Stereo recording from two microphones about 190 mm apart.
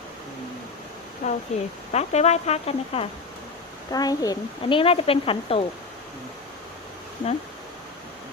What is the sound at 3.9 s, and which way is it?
A woman's voice, 20° left (ahead or behind).